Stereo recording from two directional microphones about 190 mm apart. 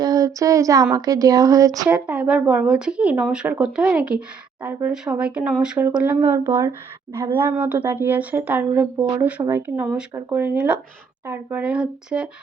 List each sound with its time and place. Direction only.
0.0 s a sound: 20° right (ahead or behind)
0.9 s speech: 20° right (ahead or behind)
1.9 s speech: 5° right (ahead or behind)